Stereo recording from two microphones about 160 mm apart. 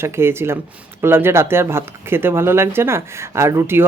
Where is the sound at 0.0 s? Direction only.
15° right (ahead or behind).